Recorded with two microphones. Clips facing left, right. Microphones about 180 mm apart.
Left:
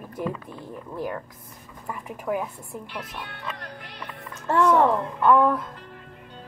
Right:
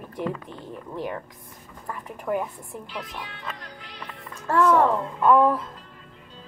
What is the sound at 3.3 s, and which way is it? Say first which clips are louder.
Music: left 2 dB; 55° left (ahead or behind).